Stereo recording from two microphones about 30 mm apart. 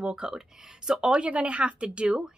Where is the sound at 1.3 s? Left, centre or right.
Right.